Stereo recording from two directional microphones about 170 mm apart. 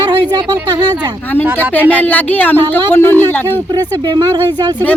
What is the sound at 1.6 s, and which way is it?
Speech, 10° left (ahead or behind).